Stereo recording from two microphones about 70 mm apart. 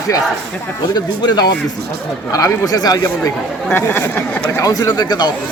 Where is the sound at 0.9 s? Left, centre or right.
Left.